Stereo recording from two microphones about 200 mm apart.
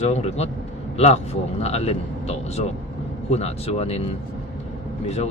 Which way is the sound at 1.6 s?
30° left (ahead or behind).